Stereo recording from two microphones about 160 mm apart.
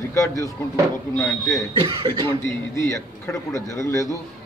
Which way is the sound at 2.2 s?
20° left (ahead or behind).